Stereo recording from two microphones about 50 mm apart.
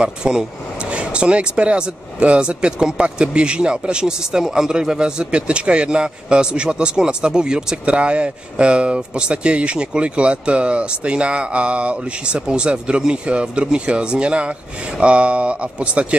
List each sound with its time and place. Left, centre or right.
0.0 s speech: centre